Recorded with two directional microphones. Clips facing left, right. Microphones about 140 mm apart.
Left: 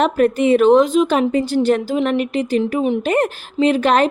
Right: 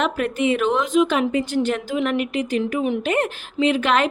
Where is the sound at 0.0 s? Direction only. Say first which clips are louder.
Left 6 dB; 40° left (ahead or behind).